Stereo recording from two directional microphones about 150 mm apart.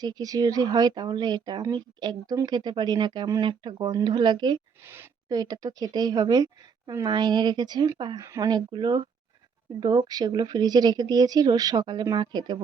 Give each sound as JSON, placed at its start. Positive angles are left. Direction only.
{"t": 0.0, "sound": "speech", "side_deg": -25}